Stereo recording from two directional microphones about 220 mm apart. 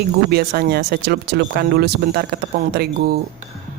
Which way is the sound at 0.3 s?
45° right (ahead or behind).